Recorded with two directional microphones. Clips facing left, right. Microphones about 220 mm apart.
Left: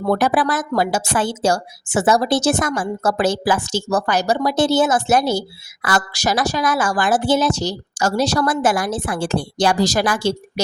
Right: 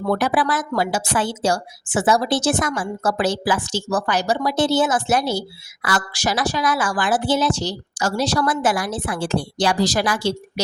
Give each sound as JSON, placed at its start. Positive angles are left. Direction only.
{"t": 0.1, "sound": "speech", "side_deg": 45}